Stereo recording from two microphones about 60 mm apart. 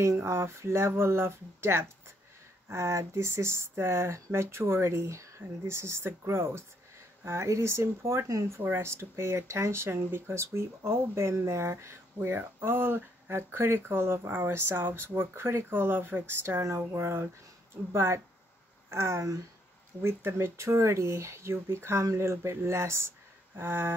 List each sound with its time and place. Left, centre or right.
0.0 s speech: right
7.2 s speech: right
8.6 s speech: right
23.5 s a sound: right